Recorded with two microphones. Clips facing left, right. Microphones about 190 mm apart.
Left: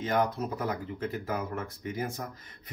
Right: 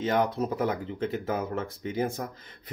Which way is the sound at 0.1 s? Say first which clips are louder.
Right 1 dB; 30° right (ahead or behind).